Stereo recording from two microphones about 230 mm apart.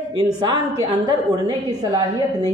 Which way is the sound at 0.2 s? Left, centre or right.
Centre.